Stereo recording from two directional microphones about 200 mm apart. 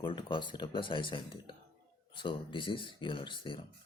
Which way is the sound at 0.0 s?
25° left (ahead or behind).